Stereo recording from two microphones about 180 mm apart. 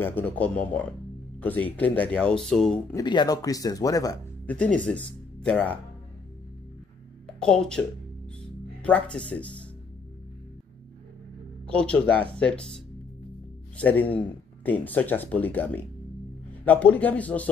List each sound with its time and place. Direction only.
0.0 s speech: 10° left (ahead or behind)
2.9 s speech: 25° left (ahead or behind)
4.5 s speech: 5° left (ahead or behind)
7.4 s speech: 5° left (ahead or behind)
8.8 s speech: 5° left (ahead or behind)
11.6 s speech: 5° left (ahead or behind)
13.7 s speech: 10° left (ahead or behind)